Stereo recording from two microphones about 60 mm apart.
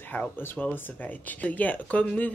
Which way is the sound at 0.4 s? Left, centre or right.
Left.